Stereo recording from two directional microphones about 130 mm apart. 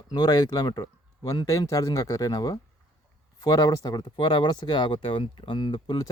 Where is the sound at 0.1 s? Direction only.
30° left (ahead or behind).